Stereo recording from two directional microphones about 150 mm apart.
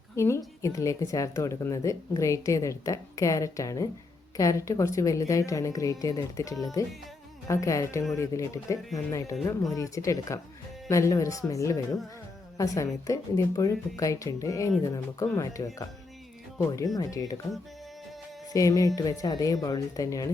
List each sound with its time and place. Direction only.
0.2 s speech: 20° left (ahead or behind)
18.5 s speech: 20° left (ahead or behind)